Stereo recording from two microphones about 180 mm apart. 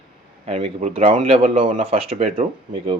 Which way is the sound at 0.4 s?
35° right (ahead or behind).